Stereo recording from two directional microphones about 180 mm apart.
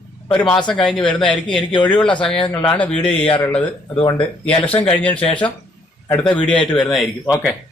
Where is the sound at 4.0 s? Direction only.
30° left (ahead or behind).